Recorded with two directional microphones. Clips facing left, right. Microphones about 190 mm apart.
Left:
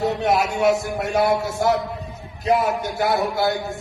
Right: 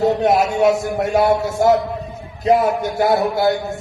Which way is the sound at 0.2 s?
45° right (ahead or behind).